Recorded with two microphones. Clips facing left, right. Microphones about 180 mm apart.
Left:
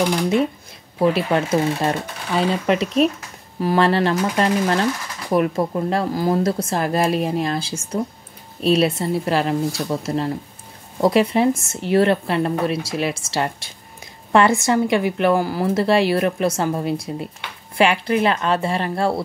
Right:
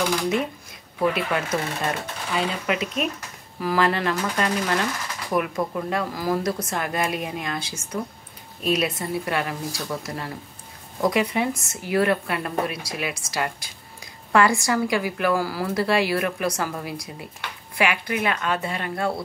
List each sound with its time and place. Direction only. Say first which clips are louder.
0.9 s a woman's voice: left 5 dB; 30° left (ahead or behind)